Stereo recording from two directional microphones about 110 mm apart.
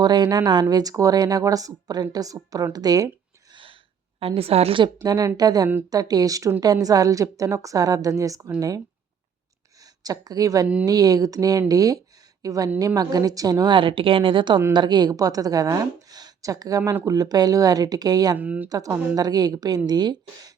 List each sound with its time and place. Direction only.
0.0 s speech: 40° right (ahead or behind)
3.5 s gasp: 50° right (ahead or behind)
4.2 s a woman's voice: 60° right (ahead or behind)
5.0 s speech: 35° right (ahead or behind)
9.8 s a woman's voice: 35° right (ahead or behind)
18.3 s speech: 15° right (ahead or behind)
18.7 s speech: 30° right (ahead or behind)